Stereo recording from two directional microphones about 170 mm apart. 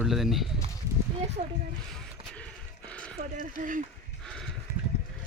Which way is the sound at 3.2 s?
50° right (ahead or behind).